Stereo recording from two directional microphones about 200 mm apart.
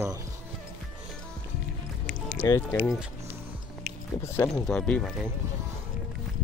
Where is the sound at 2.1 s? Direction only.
5° right (ahead or behind).